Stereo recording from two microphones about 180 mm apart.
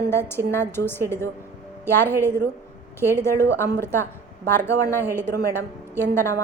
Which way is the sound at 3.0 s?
15° left (ahead or behind).